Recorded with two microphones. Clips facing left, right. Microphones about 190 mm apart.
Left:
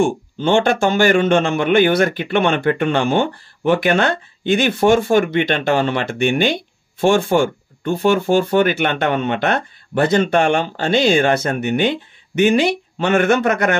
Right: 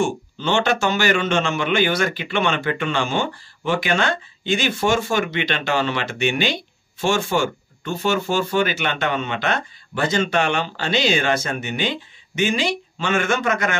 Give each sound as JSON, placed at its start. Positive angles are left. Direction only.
{"t": 0.0, "sound": "a man's voice", "side_deg": 50}